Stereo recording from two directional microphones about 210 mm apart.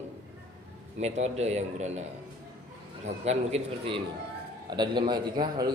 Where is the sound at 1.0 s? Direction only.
30° right (ahead or behind).